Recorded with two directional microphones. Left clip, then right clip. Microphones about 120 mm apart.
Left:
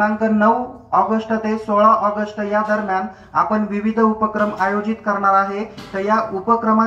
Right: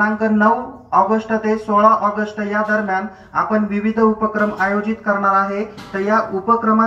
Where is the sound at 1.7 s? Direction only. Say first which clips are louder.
Even; 15° left (ahead or behind).